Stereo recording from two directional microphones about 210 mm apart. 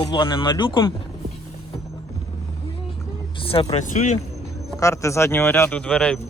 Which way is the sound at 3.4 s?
25° left (ahead or behind).